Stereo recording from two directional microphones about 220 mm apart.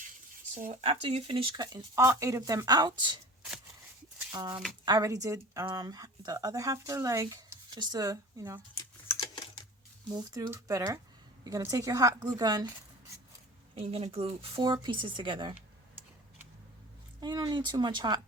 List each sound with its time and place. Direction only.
0.5 s speech: 30° right (ahead or behind)
4.3 s speech: 15° right (ahead or behind)
8.8 s typing: 15° left (ahead or behind)
10.2 s speech: 15° right (ahead or behind)
13.7 s speech: 25° right (ahead or behind)
17.2 s speech: 20° right (ahead or behind)